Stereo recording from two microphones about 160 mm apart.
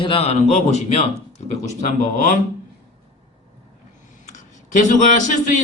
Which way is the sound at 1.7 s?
55° left (ahead or behind).